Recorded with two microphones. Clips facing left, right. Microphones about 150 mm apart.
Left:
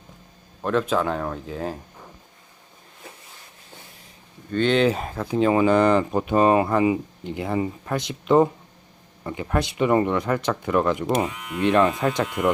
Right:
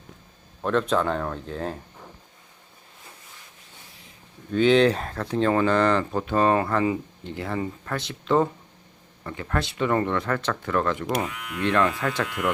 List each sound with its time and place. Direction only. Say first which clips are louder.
0.6 s speech: left 1 dB; 5° left (ahead or behind)
4.5 s speech: right 1 dB; centre (ahead or behind); by 12.5 s 20° left (ahead or behind)